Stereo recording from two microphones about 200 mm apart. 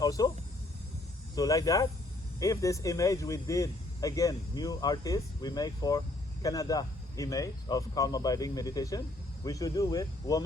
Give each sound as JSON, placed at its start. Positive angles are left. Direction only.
{"t": 0.0, "sound": "speech", "side_deg": 15}
{"t": 1.4, "sound": "speech", "side_deg": 15}